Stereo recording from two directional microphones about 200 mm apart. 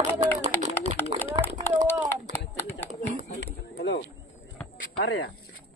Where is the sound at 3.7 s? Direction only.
60° left (ahead or behind).